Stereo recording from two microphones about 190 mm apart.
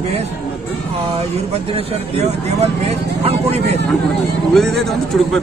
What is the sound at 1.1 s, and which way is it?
Speech, 30° right (ahead or behind).